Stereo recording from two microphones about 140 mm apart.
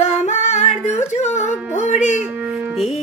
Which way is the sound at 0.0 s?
55° left (ahead or behind).